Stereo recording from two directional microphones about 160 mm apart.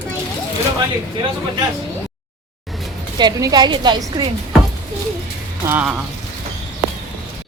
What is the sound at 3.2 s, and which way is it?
A woman's voice, 25° right (ahead or behind).